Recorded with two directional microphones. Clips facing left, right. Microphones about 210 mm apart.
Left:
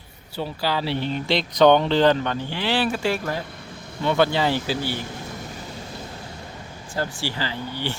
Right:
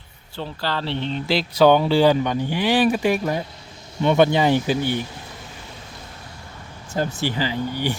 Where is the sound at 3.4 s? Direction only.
55° left (ahead or behind).